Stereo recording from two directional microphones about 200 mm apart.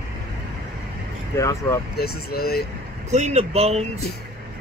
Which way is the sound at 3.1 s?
35° right (ahead or behind).